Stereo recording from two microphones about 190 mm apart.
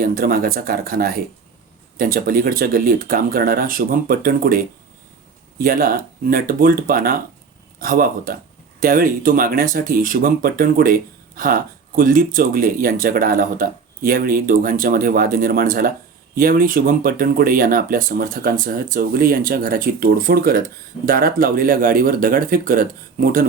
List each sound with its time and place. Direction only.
0.0 s speech: 50° right (ahead or behind)